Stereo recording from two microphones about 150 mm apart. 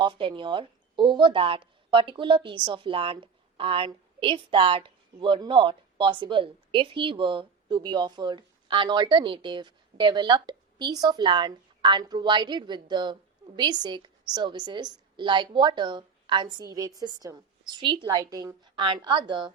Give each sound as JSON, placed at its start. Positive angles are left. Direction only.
{"t": 0.0, "sound": "a woman's voice", "side_deg": -35}